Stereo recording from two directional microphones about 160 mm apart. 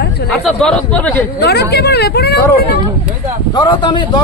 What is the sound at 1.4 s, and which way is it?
Speech, 90° left.